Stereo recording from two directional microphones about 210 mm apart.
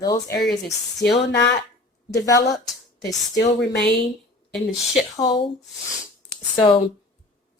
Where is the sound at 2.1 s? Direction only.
15° left (ahead or behind).